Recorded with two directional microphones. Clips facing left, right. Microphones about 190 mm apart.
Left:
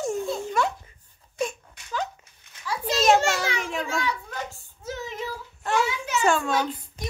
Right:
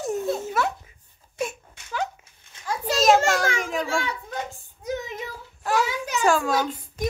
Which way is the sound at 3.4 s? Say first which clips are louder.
Right 3 dB; 50° right (ahead or behind).